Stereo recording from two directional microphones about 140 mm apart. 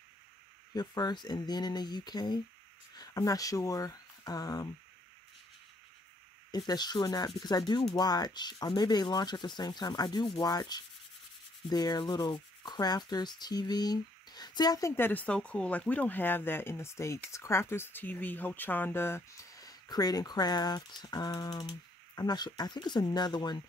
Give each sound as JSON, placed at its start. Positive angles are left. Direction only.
{"t": 0.7, "sound": "rub", "side_deg": 30}
{"t": 3.0, "sound": "speech", "side_deg": 25}
{"t": 6.5, "sound": "rub", "side_deg": 30}
{"t": 7.4, "sound": "speech", "side_deg": 30}
{"t": 7.9, "sound": "rub", "side_deg": 30}